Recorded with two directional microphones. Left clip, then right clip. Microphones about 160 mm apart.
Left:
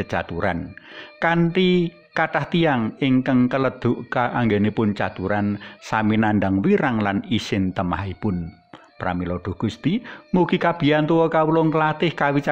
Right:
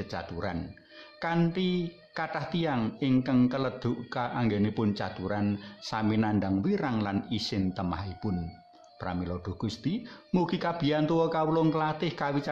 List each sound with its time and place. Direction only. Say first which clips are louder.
0.0 s speech: left 12 dB; 45° left (ahead or behind)